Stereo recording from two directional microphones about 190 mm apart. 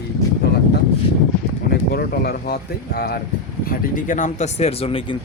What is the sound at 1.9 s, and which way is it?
Speech, 55° left (ahead or behind).